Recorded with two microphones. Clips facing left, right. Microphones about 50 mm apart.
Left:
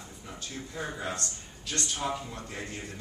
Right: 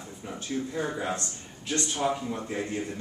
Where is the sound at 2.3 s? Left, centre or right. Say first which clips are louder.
Right 7 dB; right.